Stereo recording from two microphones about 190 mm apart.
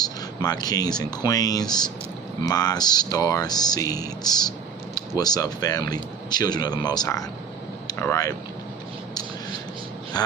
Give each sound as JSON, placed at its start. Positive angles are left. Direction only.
{"t": 0.0, "sound": "speech", "side_deg": 20}
{"t": 10.2, "sound": "speech", "side_deg": 20}